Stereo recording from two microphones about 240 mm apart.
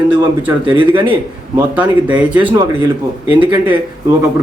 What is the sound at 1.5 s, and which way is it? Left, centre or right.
Speech, centre.